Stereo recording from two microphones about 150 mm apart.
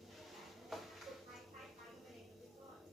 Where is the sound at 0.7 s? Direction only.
Centre (ahead or behind).